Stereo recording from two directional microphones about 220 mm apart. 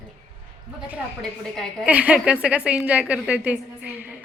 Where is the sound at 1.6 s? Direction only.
Centre (ahead or behind).